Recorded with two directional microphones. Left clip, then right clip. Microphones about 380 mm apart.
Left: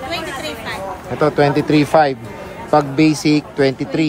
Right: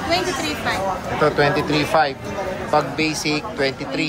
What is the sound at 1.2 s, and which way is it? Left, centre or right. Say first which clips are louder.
Speech: left 3 dB; centre.